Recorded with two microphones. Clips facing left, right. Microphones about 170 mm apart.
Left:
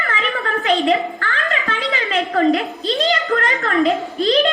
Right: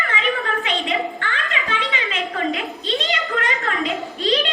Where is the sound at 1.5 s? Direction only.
35° left (ahead or behind).